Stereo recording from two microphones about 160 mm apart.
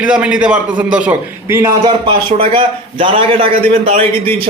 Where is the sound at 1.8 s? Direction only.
35° right (ahead or behind).